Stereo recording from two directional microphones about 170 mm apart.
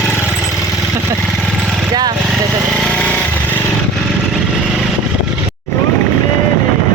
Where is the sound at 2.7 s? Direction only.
5° left (ahead or behind).